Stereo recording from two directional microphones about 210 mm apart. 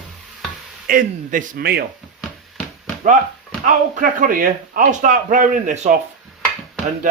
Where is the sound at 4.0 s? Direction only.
40° right (ahead or behind).